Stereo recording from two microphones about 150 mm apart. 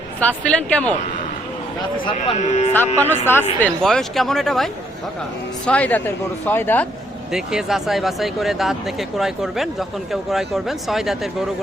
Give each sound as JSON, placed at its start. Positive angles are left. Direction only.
{"t": 0.2, "sound": "speech", "side_deg": 10}
{"t": 2.4, "sound": "speech", "side_deg": 50}
{"t": 2.7, "sound": "speech", "side_deg": 15}
{"t": 3.6, "sound": "speech", "side_deg": 5}
{"t": 7.3, "sound": "speech", "side_deg": -5}